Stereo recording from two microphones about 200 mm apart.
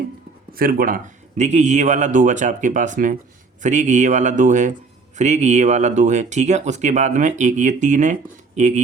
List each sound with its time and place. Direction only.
0.5 s speech: 45° right (ahead or behind)